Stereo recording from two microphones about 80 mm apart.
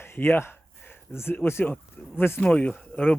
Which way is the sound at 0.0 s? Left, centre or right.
Left.